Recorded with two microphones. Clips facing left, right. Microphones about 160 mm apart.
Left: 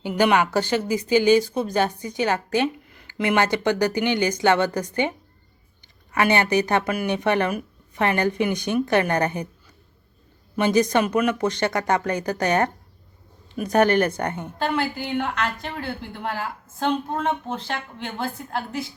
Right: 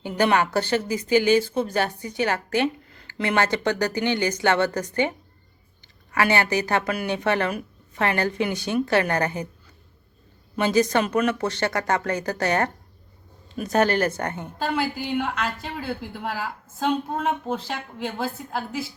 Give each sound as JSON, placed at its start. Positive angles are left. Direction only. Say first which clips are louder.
{"t": 0.0, "sound": "speech", "louder": "left 2 dB", "side_deg": 15}
{"t": 6.1, "sound": "speech", "louder": "left 2 dB", "side_deg": 20}
{"t": 10.6, "sound": "speech", "louder": "left 1 dB", "side_deg": 15}
{"t": 13.7, "sound": "speech", "louder": "left 2 dB", "side_deg": 20}
{"t": 14.8, "sound": "a woman's voice", "louder": "even", "side_deg": -10}